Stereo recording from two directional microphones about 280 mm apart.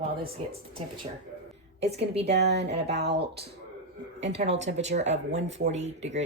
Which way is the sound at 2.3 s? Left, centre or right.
Right.